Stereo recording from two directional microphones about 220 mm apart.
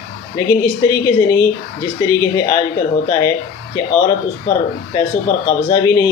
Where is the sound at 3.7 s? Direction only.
15° left (ahead or behind).